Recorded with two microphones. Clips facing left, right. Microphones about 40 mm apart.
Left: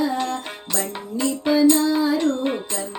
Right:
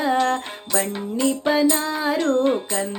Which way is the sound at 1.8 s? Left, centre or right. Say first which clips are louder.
Left 4 dB; right.